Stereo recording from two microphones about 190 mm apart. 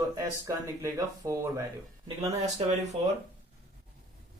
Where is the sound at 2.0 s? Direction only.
35° right (ahead or behind).